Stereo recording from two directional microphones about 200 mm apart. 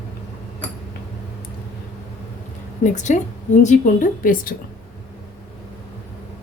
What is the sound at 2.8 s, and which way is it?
Speech, 35° left (ahead or behind).